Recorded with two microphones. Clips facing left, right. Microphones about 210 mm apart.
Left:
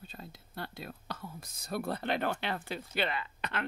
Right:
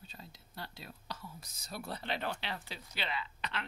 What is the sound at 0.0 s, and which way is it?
Speech, 55° left (ahead or behind).